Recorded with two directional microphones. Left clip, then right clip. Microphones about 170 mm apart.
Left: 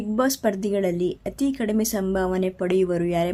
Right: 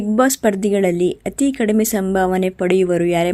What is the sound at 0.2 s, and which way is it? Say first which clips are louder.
A woman's voice: right 7 dB; 30° right (ahead or behind).